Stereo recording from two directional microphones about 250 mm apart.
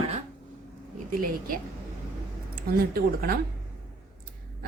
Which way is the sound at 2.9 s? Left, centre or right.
Right.